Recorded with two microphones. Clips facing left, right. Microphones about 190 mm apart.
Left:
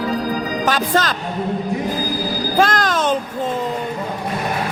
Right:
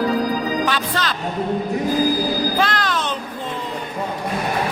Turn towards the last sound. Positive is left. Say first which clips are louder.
# left 5 dB
turn(degrees=45)  # may be behind; listen again after turning